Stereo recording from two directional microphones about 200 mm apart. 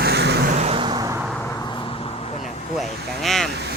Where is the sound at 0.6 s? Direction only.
25° right (ahead or behind).